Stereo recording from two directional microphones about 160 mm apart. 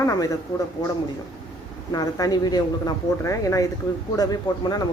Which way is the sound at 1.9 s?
25° left (ahead or behind).